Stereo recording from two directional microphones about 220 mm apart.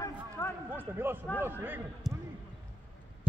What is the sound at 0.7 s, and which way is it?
A man's voice, 10° right (ahead or behind).